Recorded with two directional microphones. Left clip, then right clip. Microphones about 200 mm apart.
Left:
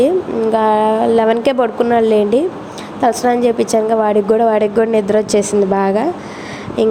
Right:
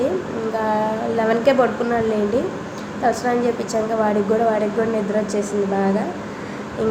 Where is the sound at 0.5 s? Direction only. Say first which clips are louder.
Left 8 dB; 40° left (ahead or behind).